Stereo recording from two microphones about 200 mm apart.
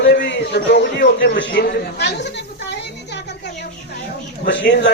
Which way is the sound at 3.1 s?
60° left (ahead or behind).